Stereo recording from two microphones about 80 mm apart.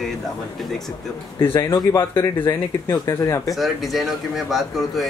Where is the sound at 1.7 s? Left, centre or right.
Left.